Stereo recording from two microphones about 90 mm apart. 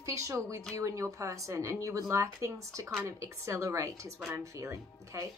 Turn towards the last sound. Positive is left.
turn(degrees=-35)  # may be behind; listen again after turning